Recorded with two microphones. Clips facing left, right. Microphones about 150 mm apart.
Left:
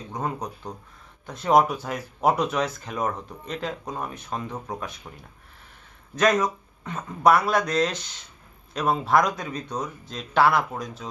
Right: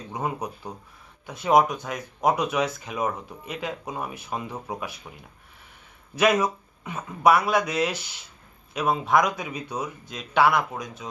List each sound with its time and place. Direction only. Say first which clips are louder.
0.1 s speech: right 1 dB; 10° right (ahead or behind)
6.1 s speech: even; 10° right (ahead or behind)